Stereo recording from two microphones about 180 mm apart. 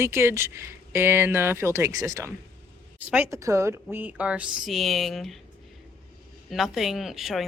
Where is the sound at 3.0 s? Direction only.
10° right (ahead or behind).